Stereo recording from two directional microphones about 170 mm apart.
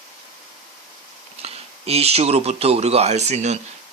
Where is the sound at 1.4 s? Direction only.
35° right (ahead or behind).